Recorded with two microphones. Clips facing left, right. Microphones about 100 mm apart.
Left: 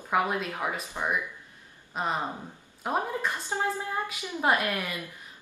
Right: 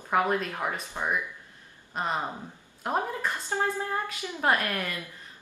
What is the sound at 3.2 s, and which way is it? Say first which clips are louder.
A woman's voice: right 1 dB; 15° left (ahead or behind).